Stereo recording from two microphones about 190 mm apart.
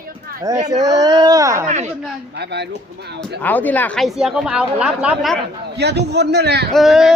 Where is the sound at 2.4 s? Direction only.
60° right (ahead or behind).